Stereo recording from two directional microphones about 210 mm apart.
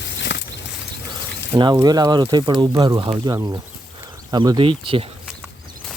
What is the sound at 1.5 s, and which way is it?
Speech, 20° right (ahead or behind).